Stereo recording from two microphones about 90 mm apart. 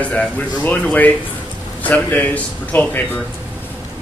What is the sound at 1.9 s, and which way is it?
Speech, 20° left (ahead or behind).